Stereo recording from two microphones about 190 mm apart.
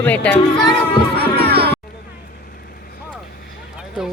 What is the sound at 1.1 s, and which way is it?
Music, 55° right (ahead or behind).